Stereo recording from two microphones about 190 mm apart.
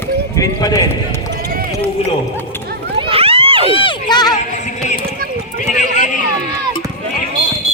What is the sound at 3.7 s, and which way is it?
Speech, 25° left (ahead or behind).